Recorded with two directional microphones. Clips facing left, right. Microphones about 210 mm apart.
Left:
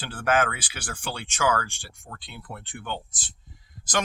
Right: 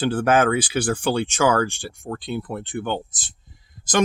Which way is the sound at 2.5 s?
55° right (ahead or behind).